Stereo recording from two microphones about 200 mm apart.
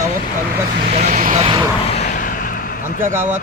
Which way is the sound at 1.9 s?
40° left (ahead or behind).